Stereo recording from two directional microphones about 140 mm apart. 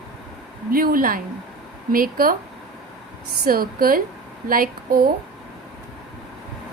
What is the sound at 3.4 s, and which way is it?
A woman's voice, 90° right.